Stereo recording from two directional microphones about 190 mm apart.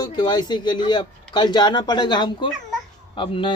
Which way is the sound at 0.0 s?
20° left (ahead or behind).